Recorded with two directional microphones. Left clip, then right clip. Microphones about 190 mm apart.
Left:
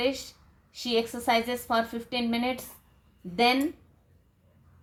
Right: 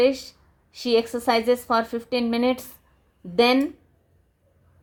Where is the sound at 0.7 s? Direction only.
50° right (ahead or behind).